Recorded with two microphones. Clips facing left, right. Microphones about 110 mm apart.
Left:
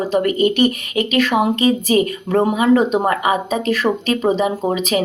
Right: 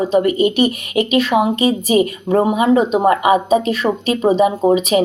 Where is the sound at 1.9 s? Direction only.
25° right (ahead or behind).